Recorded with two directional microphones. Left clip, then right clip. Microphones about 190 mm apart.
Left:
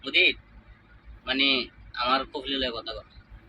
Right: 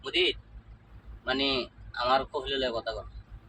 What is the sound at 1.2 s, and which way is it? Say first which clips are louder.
A man's voice: left 4 dB; 25° right (ahead or behind).